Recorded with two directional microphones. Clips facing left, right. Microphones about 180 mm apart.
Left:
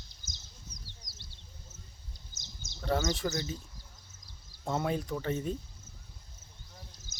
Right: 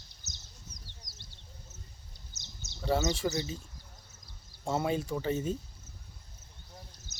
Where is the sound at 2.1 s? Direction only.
65° right (ahead or behind).